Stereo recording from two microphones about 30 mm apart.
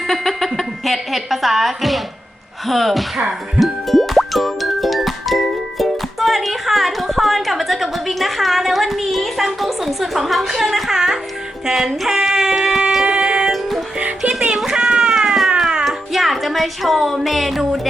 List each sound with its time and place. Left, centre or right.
0.1 s a woman's voice: centre
3.6 s music: centre
11.6 s speech: centre
13.1 s music: right
13.5 s music: centre
15.4 s music: centre
15.8 s speech: centre